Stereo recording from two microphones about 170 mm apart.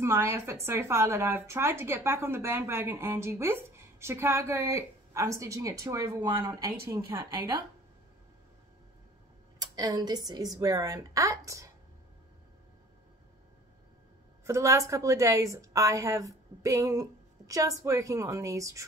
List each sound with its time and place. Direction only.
0.0 s a woman's voice: 15° right (ahead or behind)
9.6 s a woman's voice: 20° right (ahead or behind)
14.4 s a woman's voice: 15° right (ahead or behind)